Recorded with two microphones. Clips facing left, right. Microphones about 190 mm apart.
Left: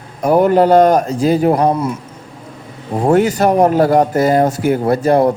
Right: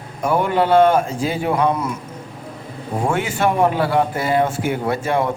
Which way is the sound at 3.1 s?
40° left (ahead or behind).